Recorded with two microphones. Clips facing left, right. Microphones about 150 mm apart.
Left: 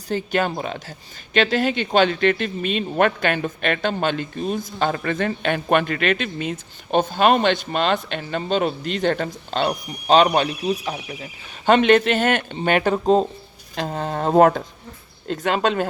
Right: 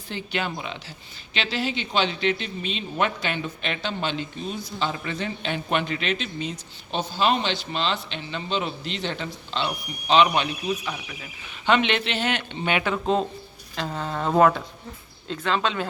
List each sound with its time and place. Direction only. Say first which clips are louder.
0.1 s speech: left 7 dB; 45° left (ahead or behind)